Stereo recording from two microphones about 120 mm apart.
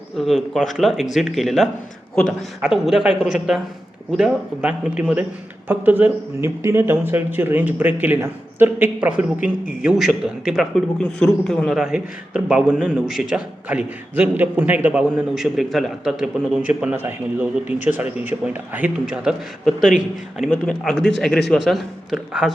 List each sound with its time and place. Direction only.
0.2 s a man's voice: centre (ahead or behind); by 15.0 s 15° right (ahead or behind)
15.4 s speech: centre (ahead or behind)
20.5 s a man's voice: 5° left (ahead or behind)